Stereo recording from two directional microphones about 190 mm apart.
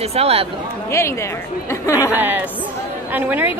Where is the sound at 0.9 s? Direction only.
15° left (ahead or behind).